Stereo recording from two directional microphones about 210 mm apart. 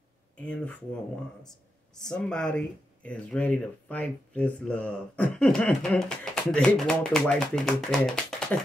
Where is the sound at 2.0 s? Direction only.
5° left (ahead or behind).